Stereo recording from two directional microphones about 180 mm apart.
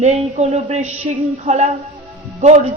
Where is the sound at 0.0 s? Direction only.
35° right (ahead or behind).